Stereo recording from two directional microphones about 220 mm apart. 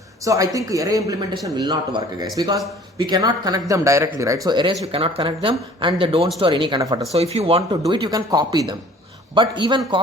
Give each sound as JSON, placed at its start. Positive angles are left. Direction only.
{"t": 0.2, "sound": "speech", "side_deg": -15}